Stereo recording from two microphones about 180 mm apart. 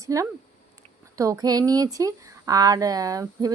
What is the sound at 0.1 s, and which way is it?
A woman's voice, 20° right (ahead or behind).